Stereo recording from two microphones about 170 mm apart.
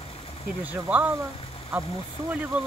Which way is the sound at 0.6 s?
10° right (ahead or behind).